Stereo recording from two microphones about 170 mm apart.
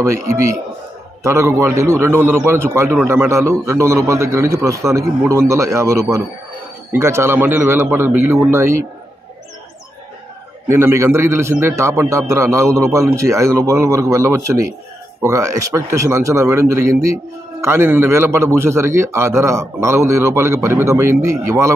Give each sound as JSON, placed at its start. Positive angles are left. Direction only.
{"t": 1.2, "sound": "speech", "side_deg": -15}
{"t": 10.7, "sound": "speech", "side_deg": -15}